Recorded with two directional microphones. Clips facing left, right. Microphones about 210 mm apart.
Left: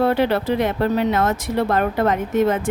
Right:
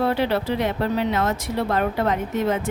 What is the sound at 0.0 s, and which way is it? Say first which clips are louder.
Speech: left 3 dB; 50° left (ahead or behind).